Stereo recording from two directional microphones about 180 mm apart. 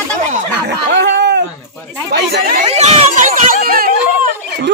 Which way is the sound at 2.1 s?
65° right (ahead or behind).